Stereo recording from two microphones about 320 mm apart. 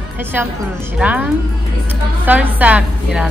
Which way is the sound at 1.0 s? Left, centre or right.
Centre.